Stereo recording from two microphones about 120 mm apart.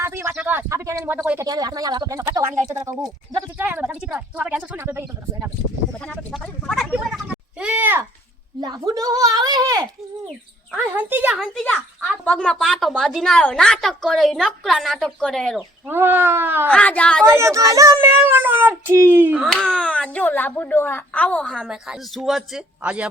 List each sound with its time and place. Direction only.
0.0 s speech: 25° right (ahead or behind)
0.3 s a woman's voice: 10° right (ahead or behind)
0.7 s a child's voice: 25° right (ahead or behind)
1.4 s a child's voice: 30° right (ahead or behind)
3.6 s a woman's voice: 15° right (ahead or behind)
6.3 s a woman's voice: centre (ahead or behind)
6.9 s a sound: 10° right (ahead or behind)
8.6 s speech: 35° right (ahead or behind)
10.7 s a woman's voice: 15° right (ahead or behind)
12.2 s a woman's voice: 10° left (ahead or behind)
15.9 s a woman's voice: 15° right (ahead or behind)
16.6 s a woman's voice: 10° left (ahead or behind)
17.2 s a child's voice: 25° right (ahead or behind)
19.5 s a woman's voice: 5° left (ahead or behind)